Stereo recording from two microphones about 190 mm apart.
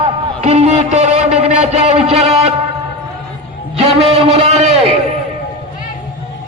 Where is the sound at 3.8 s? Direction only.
30° right (ahead or behind).